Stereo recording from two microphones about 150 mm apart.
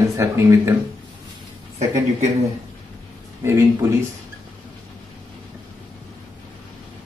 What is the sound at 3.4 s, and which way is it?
Speech, 20° right (ahead or behind).